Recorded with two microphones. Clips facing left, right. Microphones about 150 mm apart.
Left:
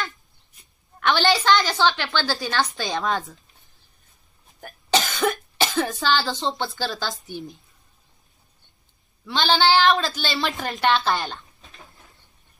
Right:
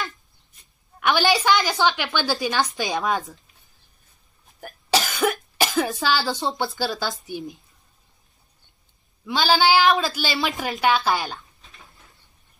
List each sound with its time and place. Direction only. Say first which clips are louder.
0.9 s a woman's voice: even; 10° right (ahead or behind)
4.6 s cough: even; 5° right (ahead or behind)
6.4 s a woman's voice: right 1 dB; 15° right (ahead or behind)
9.2 s speech: right 1 dB; 5° right (ahead or behind)